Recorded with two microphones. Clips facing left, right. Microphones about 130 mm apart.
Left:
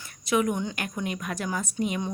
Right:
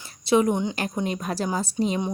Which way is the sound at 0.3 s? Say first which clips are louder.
Right 5 dB; 30° right (ahead or behind).